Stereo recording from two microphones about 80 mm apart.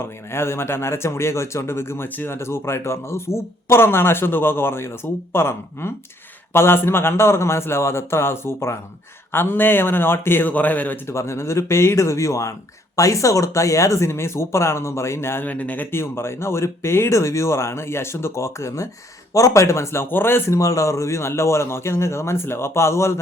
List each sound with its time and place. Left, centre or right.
0.0 s speech: left
15.4 s speech: centre
20.6 s speech: left